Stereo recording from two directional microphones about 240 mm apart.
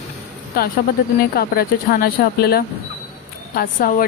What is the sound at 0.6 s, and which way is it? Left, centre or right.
A woman's voice, left.